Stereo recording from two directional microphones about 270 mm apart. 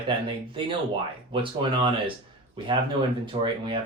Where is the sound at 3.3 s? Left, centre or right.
Centre.